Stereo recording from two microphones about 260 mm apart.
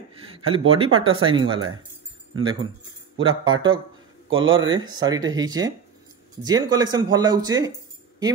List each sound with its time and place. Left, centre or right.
0.5 s speech: right
3.2 s speech: centre
4.3 s speech: right
4.7 s speech: centre